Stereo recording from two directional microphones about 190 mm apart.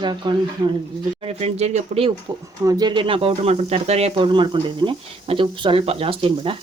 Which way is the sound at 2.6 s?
20° right (ahead or behind).